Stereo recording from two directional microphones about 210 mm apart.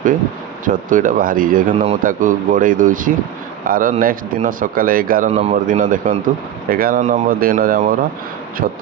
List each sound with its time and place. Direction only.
0.6 s speech: 40° right (ahead or behind)
5.3 s speech: 30° right (ahead or behind)